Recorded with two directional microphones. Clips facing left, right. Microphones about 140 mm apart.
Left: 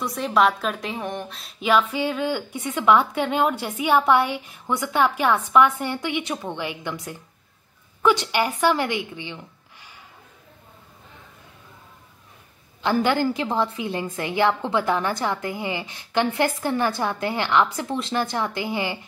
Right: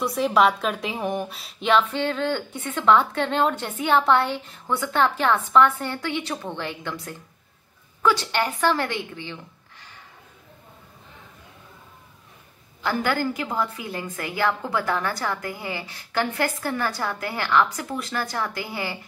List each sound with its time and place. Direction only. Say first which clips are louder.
0.0 s a woman's voice: right 1 dB; centre (ahead or behind); by 9.9 s 15° left (ahead or behind)
12.8 s a woman's voice: left 3 dB; 20° left (ahead or behind)